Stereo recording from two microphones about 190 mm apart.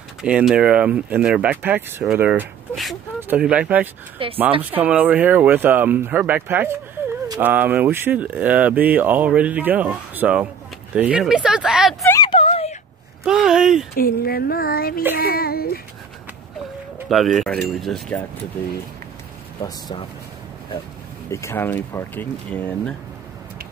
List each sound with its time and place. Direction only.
0.2 s speech: 5° right (ahead or behind)
4.2 s speech: 30° right (ahead or behind)
4.6 s speech: 10° right (ahead or behind)
12.1 s a sound: 25° left (ahead or behind)
13.2 s speech: 5° right (ahead or behind)
13.9 s speech: 50° left (ahead or behind)
17.4 s speech: centre (ahead or behind)
19.6 s speech: 20° left (ahead or behind)
21.3 s speech: 15° left (ahead or behind)